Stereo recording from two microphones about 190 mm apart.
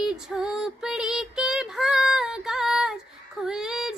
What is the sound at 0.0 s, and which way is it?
Female singing, 5° right (ahead or behind).